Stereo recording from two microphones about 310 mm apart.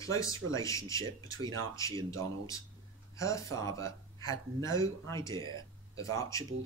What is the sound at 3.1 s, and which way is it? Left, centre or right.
Speech, centre.